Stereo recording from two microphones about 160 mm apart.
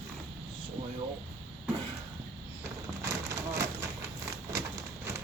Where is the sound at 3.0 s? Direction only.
20° right (ahead or behind).